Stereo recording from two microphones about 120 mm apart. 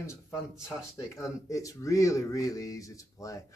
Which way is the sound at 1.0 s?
25° left (ahead or behind).